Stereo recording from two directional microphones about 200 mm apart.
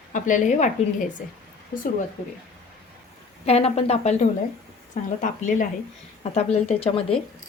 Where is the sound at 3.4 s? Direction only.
30° left (ahead or behind).